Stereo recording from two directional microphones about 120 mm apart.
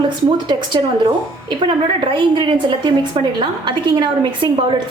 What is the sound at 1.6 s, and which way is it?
A woman's voice, 40° right (ahead or behind).